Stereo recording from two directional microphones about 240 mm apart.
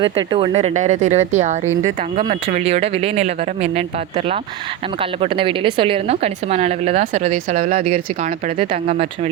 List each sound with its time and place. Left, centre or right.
0.0 s a woman's voice: right
1.6 s speech: centre
2.1 s a woman's voice: right
5.2 s a woman's voice: right